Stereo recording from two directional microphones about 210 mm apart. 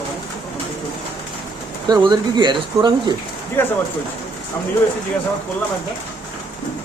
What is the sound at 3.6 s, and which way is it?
Speech, 10° left (ahead or behind).